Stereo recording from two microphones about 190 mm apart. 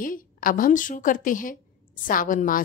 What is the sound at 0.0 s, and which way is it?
A woman's voice, 45° left (ahead or behind).